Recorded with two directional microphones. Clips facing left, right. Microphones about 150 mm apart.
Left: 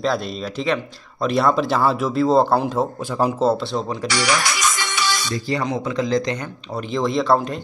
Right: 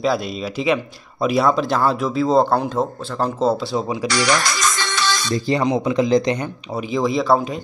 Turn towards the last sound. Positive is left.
turn(degrees=-5)  # may be behind; listen again after turning